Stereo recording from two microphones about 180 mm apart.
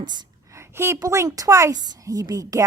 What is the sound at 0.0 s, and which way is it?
A woman's voice, 25° right (ahead or behind).